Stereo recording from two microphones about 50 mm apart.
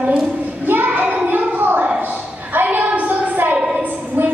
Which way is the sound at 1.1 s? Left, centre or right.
Right.